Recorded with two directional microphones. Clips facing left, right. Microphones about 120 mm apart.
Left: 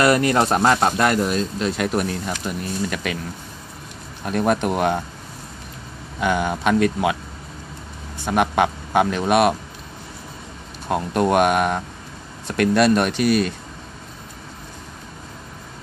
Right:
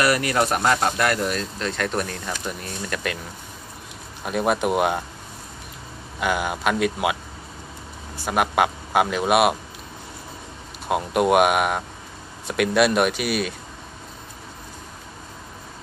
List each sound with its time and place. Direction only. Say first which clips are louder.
0.0 s speech: left 4 dB; 25° left (ahead or behind); by 3.2 s 5° left (ahead or behind)
4.2 s speech: left 2 dB; 5° right (ahead or behind)
6.1 s speech: left 3 dB; 5° right (ahead or behind)
8.2 s a man's voice: left 2 dB; 5° right (ahead or behind)
10.9 s a man's voice: even; 10° right (ahead or behind)